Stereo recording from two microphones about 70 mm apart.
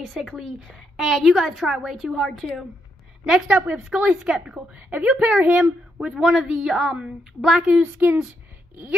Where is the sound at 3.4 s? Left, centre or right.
Right.